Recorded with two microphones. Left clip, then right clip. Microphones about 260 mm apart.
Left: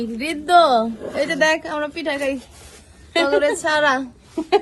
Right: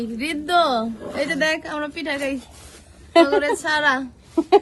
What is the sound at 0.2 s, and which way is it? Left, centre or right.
A woman's voice, centre.